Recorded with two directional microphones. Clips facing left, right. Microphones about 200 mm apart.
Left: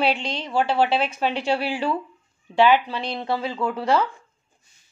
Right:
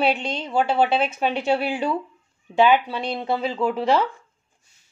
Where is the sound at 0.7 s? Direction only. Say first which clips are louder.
Right 1 dB; 20° right (ahead or behind).